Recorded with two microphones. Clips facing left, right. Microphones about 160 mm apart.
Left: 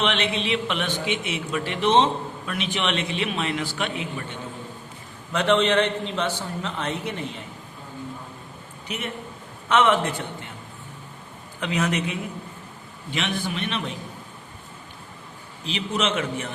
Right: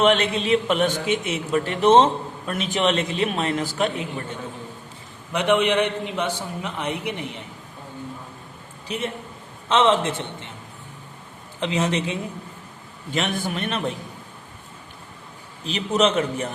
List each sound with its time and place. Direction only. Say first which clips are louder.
0.0 s a man's voice: right 5 dB; 45° right (ahead or behind)
5.3 s a man's voice: even; 15° right (ahead or behind)
8.9 s a man's voice: right 3 dB; 30° right (ahead or behind)
11.6 s a man's voice: right 2 dB; 25° right (ahead or behind)
13.1 s speech: right 2 dB; 45° right (ahead or behind)
15.6 s a man's voice: right 5 dB; 40° right (ahead or behind)